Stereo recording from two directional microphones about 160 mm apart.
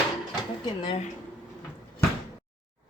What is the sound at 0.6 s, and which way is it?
Speech, 25° left (ahead or behind).